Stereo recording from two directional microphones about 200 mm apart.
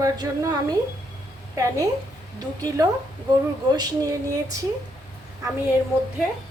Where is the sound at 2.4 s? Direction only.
20° right (ahead or behind).